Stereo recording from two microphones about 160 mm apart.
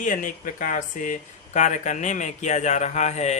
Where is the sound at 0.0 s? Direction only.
55° left (ahead or behind).